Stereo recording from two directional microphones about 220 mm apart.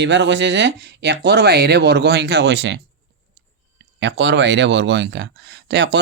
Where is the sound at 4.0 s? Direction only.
55° right (ahead or behind).